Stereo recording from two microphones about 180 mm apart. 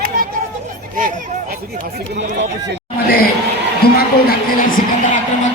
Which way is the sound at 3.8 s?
60° left (ahead or behind).